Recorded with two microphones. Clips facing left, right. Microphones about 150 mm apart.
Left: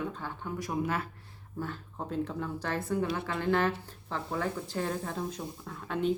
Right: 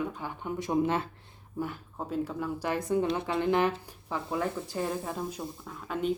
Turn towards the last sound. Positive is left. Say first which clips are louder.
# even
turn(degrees=0)  # may be behind; listen again after turning